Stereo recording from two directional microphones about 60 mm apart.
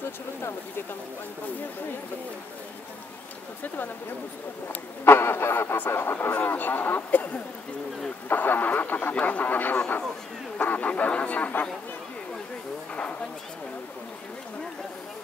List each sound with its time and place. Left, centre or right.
3.6 s speech: left
5.0 s speech: left